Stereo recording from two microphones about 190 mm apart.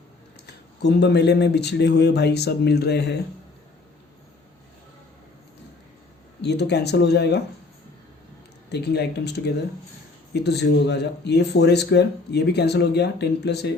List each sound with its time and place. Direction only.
0.4 s a man's voice: 60° left (ahead or behind)
6.4 s a man's voice: 60° left (ahead or behind)
8.7 s a man's voice: 60° left (ahead or behind)